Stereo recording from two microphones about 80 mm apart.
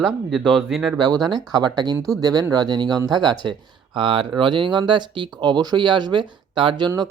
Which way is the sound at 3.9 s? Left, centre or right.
Right.